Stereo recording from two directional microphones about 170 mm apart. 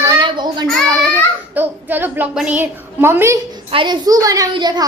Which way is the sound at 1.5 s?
10° right (ahead or behind).